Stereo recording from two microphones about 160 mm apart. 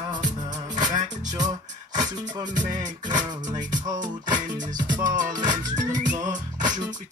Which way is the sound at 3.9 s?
55° right (ahead or behind).